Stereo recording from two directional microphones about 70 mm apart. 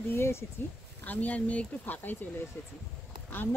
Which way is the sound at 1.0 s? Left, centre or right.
Left.